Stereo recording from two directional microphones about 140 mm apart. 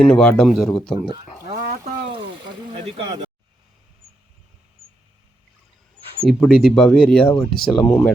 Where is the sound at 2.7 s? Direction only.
55° right (ahead or behind).